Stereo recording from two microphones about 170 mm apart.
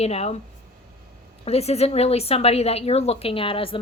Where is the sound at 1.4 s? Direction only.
35° left (ahead or behind).